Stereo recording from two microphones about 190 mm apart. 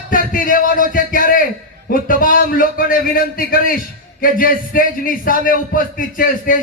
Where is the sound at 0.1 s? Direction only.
45° left (ahead or behind).